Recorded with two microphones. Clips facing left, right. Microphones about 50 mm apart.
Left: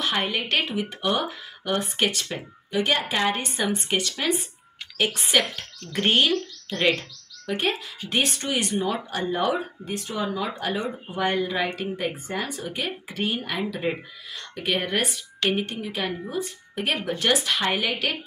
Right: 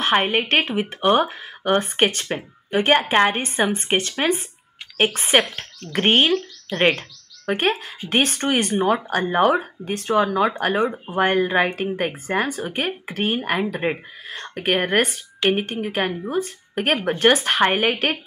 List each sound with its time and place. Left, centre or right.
0.0 s speech: right